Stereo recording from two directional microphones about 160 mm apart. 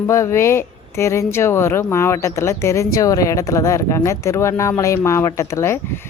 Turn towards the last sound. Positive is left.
turn(degrees=15)  # may be behind; listen again after turning